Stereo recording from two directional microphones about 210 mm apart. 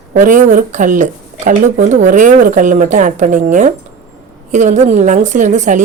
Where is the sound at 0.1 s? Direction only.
35° right (ahead or behind).